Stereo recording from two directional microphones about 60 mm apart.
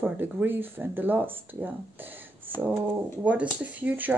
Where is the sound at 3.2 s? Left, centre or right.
Right.